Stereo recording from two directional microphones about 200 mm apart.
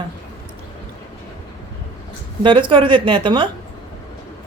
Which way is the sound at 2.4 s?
25° right (ahead or behind).